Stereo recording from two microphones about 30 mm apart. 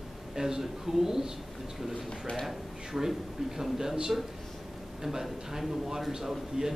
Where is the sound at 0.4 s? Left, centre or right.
Centre.